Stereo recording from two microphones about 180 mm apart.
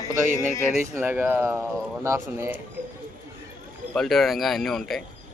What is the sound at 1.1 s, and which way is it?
Speech, 10° right (ahead or behind).